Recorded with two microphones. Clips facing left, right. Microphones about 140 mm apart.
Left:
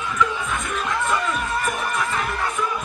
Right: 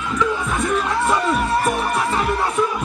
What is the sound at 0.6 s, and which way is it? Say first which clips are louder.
Speech: right 8 dB; 35° right (ahead or behind).